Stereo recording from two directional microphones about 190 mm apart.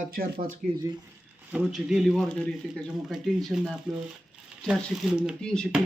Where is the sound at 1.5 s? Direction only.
Centre (ahead or behind).